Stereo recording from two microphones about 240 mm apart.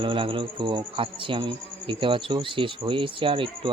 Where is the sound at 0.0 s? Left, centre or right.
Right.